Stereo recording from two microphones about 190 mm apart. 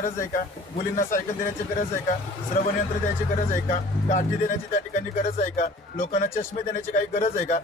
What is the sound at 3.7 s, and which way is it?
Speech, 40° left (ahead or behind).